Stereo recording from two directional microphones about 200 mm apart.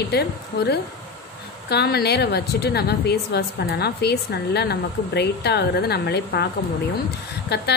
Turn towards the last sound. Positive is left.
turn(degrees=55)  # may be behind; listen again after turning